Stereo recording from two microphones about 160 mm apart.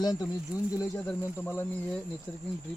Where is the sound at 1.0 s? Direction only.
10° left (ahead or behind).